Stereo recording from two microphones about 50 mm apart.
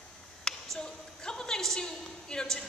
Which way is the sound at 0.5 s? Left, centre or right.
Centre.